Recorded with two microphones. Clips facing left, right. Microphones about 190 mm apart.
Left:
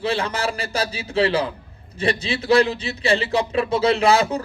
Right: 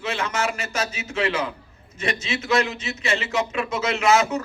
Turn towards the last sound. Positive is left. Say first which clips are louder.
# left 2 dB
turn(degrees=35)  # may be behind; listen again after turning